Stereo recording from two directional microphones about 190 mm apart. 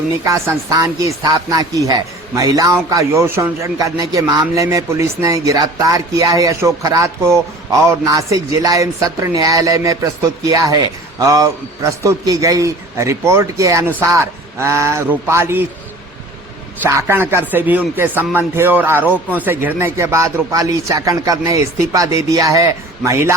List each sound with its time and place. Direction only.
0.3 s a man's voice: 15° right (ahead or behind)
16.8 s a man's voice: 10° right (ahead or behind)